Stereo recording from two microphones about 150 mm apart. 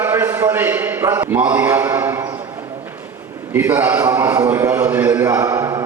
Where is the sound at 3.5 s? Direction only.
10° right (ahead or behind).